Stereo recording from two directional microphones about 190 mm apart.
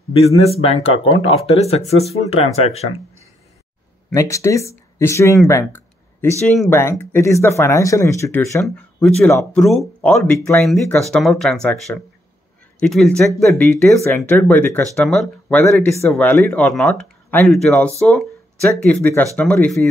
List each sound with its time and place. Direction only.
0.1 s speech: 30° left (ahead or behind)
4.1 s speech: 15° left (ahead or behind)
6.4 s speech: centre (ahead or behind)
6.7 s speech: 10° left (ahead or behind)
15.6 s speech: 15° left (ahead or behind)